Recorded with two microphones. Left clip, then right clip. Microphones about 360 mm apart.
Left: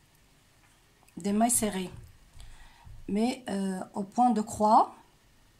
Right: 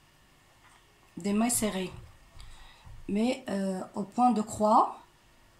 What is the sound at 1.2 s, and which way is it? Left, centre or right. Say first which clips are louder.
Speech: left 3 dB; centre.